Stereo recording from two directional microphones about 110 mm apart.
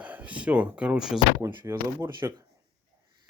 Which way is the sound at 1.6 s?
25° right (ahead or behind).